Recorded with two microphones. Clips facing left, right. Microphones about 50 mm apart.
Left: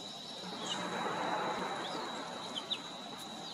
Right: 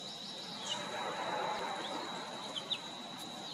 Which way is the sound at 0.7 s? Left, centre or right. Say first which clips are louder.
Left 2 dB; centre.